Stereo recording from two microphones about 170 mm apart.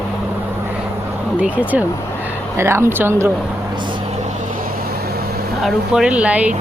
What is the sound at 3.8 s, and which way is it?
Vehicle, 30° right (ahead or behind).